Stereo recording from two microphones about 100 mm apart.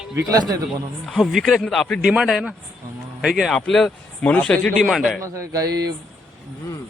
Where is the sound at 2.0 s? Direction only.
5° right (ahead or behind); by 4.7 s 10° left (ahead or behind).